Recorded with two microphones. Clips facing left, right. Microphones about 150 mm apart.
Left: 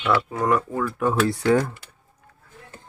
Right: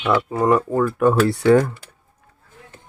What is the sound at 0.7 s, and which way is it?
Speech, 50° right (ahead or behind).